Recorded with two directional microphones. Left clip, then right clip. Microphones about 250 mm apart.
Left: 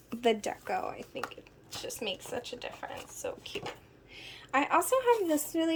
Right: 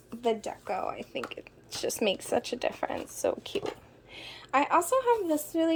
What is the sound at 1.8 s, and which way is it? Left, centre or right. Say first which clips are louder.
A woman's voice: right 8 dB; centre.